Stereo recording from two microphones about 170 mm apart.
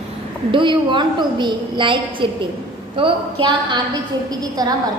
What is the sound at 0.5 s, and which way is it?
A woman's voice, 30° right (ahead or behind).